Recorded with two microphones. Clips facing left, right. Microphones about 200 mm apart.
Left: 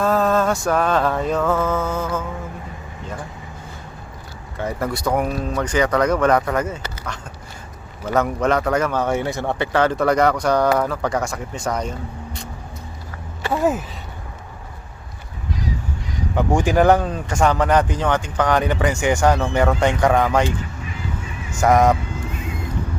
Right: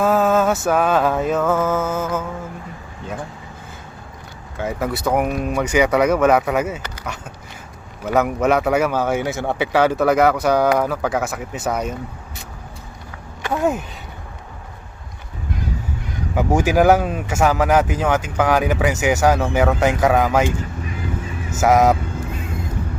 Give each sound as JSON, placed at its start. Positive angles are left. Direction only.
{"t": 0.0, "sound": "speech", "side_deg": -5}
{"t": 4.5, "sound": "a man's voice", "side_deg": 0}
{"t": 8.0, "sound": "a man's voice", "side_deg": -5}
{"t": 13.4, "sound": "speech", "side_deg": 5}
{"t": 15.5, "sound": "a sound", "side_deg": -55}
{"t": 16.3, "sound": "speech", "side_deg": -5}
{"t": 21.6, "sound": "speech", "side_deg": -5}